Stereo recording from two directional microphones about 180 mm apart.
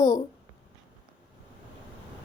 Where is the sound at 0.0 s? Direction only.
20° left (ahead or behind).